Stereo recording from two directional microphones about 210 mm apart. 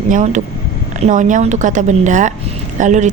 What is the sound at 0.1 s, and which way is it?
A woman's voice, 35° right (ahead or behind).